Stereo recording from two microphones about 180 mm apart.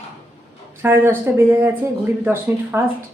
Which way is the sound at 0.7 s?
10° right (ahead or behind).